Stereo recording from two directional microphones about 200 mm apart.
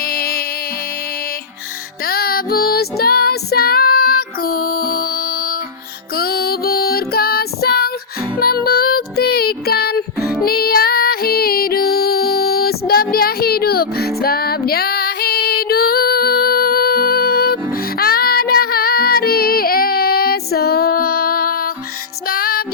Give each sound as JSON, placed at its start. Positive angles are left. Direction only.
{"t": 0.0, "sound": "music", "side_deg": 45}
{"t": 2.0, "sound": "music", "side_deg": 50}
{"t": 14.2, "sound": "female singing", "side_deg": 50}
{"t": 17.9, "sound": "music", "side_deg": 50}